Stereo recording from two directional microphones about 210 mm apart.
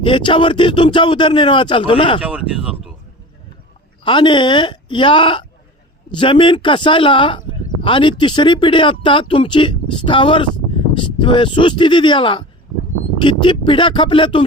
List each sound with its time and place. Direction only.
0.0 s speech: 25° left (ahead or behind)
2.2 s speech: 5° right (ahead or behind)
4.0 s speech: 25° left (ahead or behind)